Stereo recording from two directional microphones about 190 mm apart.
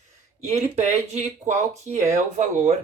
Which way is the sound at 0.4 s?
35° right (ahead or behind).